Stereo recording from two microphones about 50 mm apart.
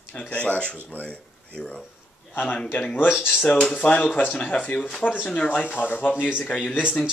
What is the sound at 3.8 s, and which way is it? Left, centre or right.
Speech, left.